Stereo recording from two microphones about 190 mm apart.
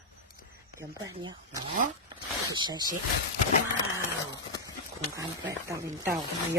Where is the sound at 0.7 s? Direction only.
20° right (ahead or behind).